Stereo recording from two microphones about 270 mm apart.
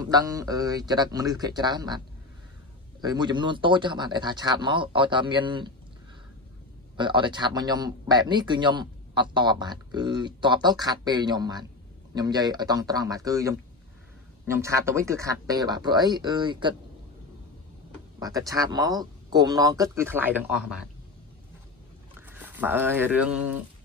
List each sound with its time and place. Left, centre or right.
0.0 s a man's voice: centre
3.0 s a man's voice: centre
7.0 s a man's voice: centre
18.2 s a man's voice: centre
22.3 s speech: centre